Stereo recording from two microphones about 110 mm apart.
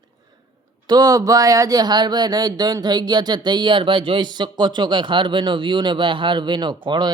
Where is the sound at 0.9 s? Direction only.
35° right (ahead or behind).